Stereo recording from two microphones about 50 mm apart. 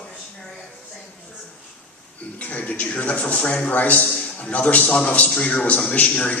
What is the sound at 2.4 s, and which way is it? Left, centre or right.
A man's voice, left.